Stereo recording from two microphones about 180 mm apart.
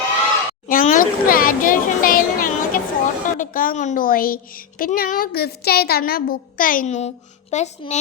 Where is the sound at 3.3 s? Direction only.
45° left (ahead or behind).